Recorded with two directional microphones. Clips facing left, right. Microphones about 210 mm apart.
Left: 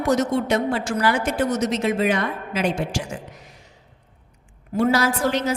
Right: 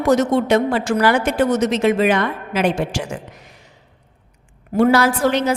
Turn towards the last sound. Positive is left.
turn(degrees=-65)  # may be behind; listen again after turning